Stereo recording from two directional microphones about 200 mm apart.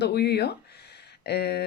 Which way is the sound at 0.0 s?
55° left (ahead or behind).